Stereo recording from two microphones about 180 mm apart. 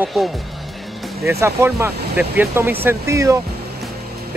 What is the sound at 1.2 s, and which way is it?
Speech, 15° right (ahead or behind).